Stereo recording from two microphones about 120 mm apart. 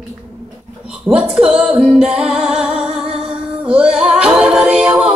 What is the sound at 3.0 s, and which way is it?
Music, 55° right (ahead or behind).